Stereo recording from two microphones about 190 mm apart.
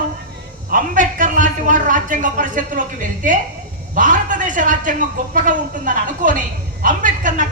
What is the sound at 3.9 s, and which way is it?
Speech, 45° right (ahead or behind).